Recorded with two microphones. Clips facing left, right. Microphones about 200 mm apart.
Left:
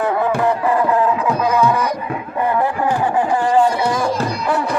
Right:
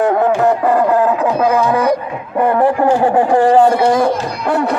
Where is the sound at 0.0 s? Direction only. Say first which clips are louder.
Right 5 dB; 45° right (ahead or behind).